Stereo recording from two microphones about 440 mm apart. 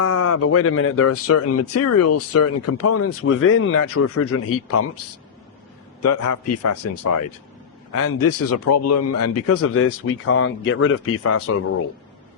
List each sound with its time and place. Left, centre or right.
0.0 s speech: left
6.0 s a man's voice: left